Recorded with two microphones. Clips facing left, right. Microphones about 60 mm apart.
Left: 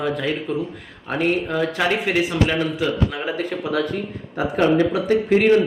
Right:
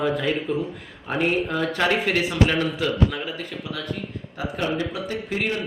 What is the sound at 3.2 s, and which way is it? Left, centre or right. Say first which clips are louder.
Speech: left 7 dB; left.